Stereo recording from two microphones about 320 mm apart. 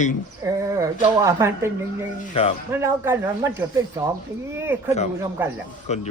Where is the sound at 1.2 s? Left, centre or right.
Centre.